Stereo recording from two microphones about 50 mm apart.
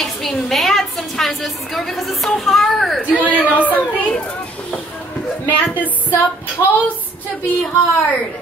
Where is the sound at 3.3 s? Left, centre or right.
Right.